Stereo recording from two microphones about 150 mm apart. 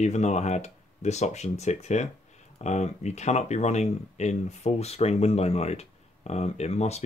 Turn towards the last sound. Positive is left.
turn(degrees=45)  # may be behind; listen again after turning